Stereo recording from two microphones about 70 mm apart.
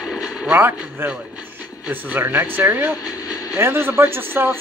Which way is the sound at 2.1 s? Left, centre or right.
Right.